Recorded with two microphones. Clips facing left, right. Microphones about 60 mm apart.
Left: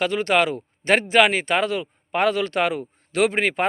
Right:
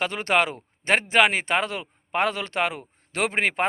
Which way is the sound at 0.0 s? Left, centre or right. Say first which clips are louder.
Left 3 dB; right.